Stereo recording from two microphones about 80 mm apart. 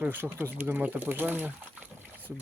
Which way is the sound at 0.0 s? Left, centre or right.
Right.